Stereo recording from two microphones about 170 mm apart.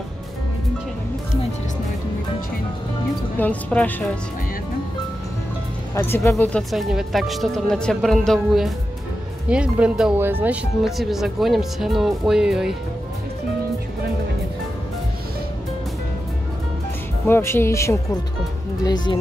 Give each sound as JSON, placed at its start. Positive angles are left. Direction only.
{"t": 3.3, "sound": "speech", "side_deg": 10}
{"t": 5.9, "sound": "speech", "side_deg": 15}
{"t": 6.7, "sound": "speech", "side_deg": 0}
{"t": 17.3, "sound": "speech", "side_deg": 15}